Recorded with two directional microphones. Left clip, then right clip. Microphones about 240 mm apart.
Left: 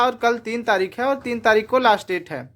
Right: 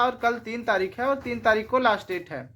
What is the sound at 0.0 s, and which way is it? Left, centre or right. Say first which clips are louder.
A woman's voice: left 5 dB; left.